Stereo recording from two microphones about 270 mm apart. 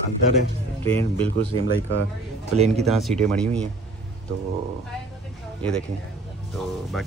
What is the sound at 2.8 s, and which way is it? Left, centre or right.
Speech, centre.